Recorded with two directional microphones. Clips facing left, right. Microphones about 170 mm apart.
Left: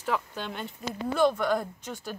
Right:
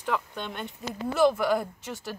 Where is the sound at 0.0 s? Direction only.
5° left (ahead or behind).